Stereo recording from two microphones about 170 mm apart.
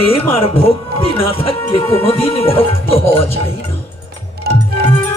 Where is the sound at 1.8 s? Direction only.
15° left (ahead or behind).